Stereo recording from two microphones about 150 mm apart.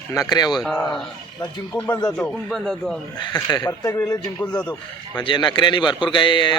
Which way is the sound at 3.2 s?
30° left (ahead or behind).